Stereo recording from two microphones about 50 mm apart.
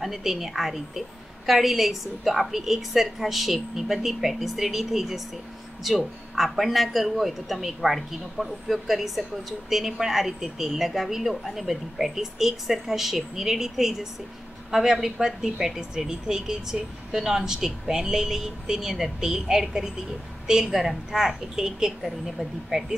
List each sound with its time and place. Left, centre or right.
0.0 s a man's voice: centre